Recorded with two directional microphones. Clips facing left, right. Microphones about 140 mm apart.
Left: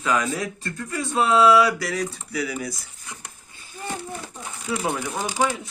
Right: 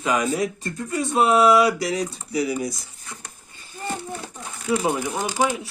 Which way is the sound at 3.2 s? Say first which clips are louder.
Even; 10° left (ahead or behind).